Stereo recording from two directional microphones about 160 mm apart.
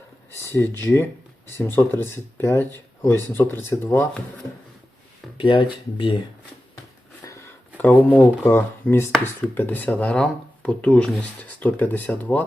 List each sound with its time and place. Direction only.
0.5 s speech: 15° left (ahead or behind)
5.4 s speech: 30° left (ahead or behind)
7.2 s a sound: 20° left (ahead or behind)
7.8 s speech: 10° left (ahead or behind)